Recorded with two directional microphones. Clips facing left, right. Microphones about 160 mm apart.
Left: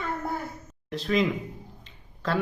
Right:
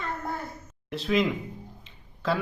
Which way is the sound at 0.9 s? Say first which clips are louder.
Even; centre (ahead or behind).